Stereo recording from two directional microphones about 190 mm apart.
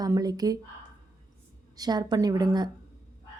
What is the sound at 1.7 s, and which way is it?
Speech, 20° right (ahead or behind).